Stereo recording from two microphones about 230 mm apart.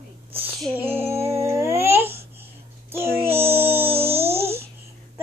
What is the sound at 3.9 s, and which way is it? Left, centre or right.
Music, right.